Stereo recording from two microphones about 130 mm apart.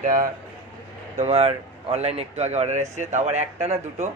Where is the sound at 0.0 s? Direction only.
90° right.